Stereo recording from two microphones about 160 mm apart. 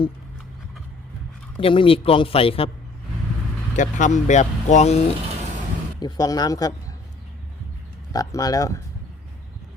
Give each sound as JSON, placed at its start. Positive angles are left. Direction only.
{"t": 1.5, "sound": "speech", "side_deg": 35}
{"t": 3.8, "sound": "speech", "side_deg": 50}
{"t": 6.0, "sound": "speech", "side_deg": 25}
{"t": 8.1, "sound": "speech", "side_deg": 20}